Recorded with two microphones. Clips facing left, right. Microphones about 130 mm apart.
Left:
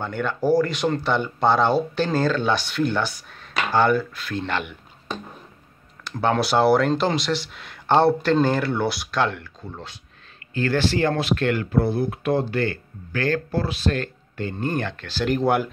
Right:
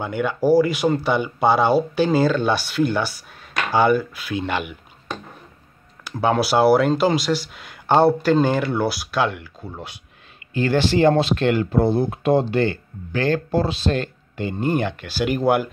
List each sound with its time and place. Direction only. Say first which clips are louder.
0.0 s speech: right 3 dB; 10° right (ahead or behind)
6.0 s speech: right 2 dB; 5° right (ahead or behind)